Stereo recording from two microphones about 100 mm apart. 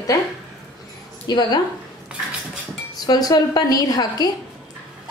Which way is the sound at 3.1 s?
40° left (ahead or behind).